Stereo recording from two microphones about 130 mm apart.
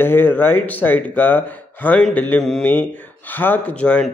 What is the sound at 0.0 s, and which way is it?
A man's voice, 15° left (ahead or behind).